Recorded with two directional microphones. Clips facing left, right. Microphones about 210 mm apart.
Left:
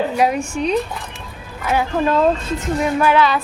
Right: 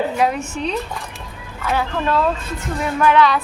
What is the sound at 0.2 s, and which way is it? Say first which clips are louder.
Speech: left 2 dB; 10° left (ahead or behind).